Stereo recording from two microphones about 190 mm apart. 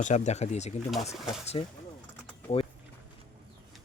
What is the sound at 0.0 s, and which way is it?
Speech, 35° left (ahead or behind).